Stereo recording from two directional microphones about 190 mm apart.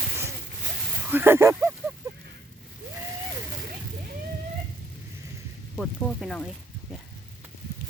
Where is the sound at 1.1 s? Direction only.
10° right (ahead or behind).